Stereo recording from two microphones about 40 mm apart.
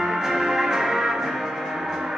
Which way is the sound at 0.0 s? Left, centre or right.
Centre.